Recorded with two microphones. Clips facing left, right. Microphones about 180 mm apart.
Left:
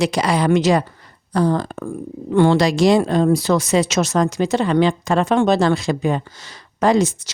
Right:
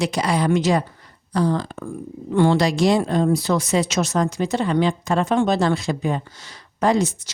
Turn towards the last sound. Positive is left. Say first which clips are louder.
# left 3 dB
turn(degrees=90)